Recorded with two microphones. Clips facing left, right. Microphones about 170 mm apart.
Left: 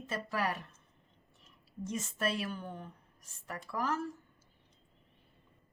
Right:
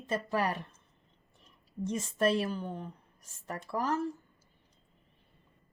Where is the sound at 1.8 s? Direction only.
35° right (ahead or behind).